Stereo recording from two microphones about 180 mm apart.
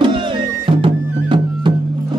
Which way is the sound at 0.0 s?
25° right (ahead or behind).